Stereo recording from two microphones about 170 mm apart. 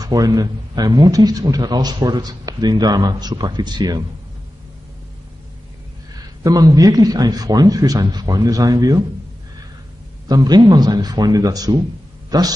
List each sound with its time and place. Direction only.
0.0 s a man's voice: 20° right (ahead or behind)
6.4 s a man's voice: 20° right (ahead or behind)
10.2 s a man's voice: 25° right (ahead or behind)